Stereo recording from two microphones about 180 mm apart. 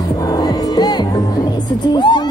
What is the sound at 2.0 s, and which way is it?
Music, 25° left (ahead or behind).